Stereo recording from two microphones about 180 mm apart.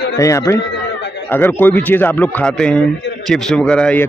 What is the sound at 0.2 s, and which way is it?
A man's voice, 15° left (ahead or behind).